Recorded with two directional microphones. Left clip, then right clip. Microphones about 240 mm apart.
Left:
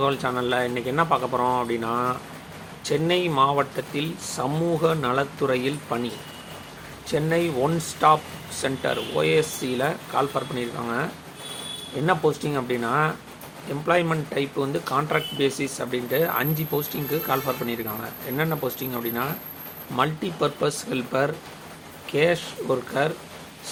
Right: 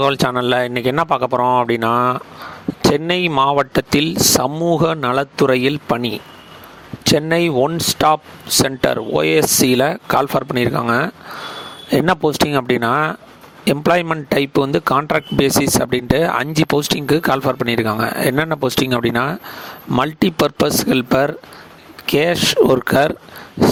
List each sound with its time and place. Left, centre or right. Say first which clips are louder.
0.0 s speech: right 8 dB; right